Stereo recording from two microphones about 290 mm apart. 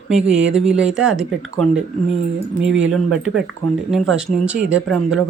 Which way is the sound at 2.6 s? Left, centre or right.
Right.